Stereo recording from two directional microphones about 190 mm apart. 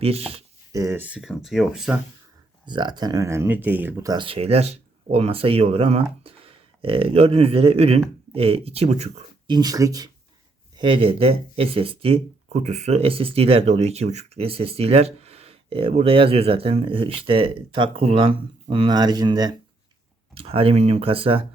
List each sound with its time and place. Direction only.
0.0 s speech: 30° right (ahead or behind)
0.7 s speech: 15° right (ahead or behind)
2.6 s speech: 25° right (ahead or behind)
9.5 s speech: 20° right (ahead or behind)